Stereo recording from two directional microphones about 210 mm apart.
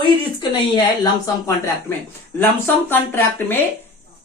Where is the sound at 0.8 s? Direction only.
15° left (ahead or behind).